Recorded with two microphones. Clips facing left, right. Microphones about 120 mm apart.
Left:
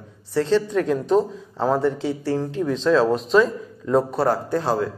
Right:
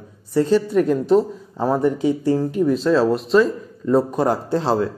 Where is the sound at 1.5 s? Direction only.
15° right (ahead or behind).